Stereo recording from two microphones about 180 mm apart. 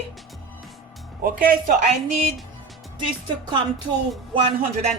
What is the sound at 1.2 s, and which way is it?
Speech, 50° right (ahead or behind).